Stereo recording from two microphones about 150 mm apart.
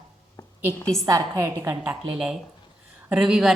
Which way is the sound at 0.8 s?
5° left (ahead or behind).